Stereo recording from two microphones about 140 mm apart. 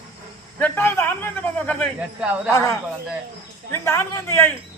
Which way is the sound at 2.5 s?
20° left (ahead or behind).